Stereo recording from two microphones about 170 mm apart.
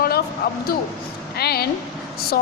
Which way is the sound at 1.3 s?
65° left (ahead or behind).